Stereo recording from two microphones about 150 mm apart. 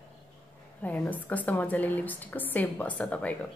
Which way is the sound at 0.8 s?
10° left (ahead or behind).